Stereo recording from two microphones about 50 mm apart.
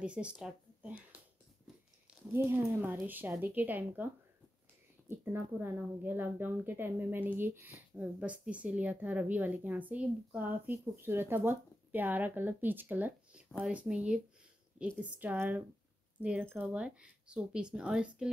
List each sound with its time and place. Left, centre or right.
0.0 s speech: right
1.7 s biting: centre
2.4 s speech: right
2.7 s speech: right
5.2 s speech: right
8.2 s speech: right
13.6 s speech: right
15.0 s speech: right
16.7 s speech: centre